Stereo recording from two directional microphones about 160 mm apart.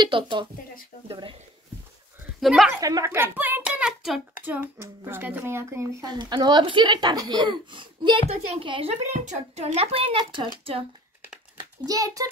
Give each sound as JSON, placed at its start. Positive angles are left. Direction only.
{"t": 0.0, "sound": "speech", "side_deg": -30}
{"t": 2.4, "sound": "a woman's voice", "side_deg": 0}
{"t": 2.7, "sound": "a child's voice", "side_deg": -20}
{"t": 11.8, "sound": "speech", "side_deg": -20}